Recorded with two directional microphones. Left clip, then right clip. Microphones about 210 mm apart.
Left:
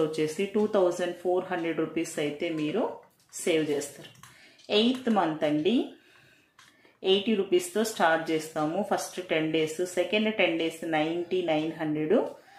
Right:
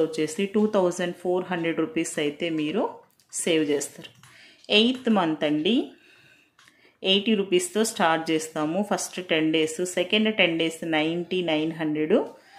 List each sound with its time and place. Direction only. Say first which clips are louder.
0.1 s speech: right 2 dB; 40° right (ahead or behind)
7.0 s speech: right 3 dB; 45° right (ahead or behind)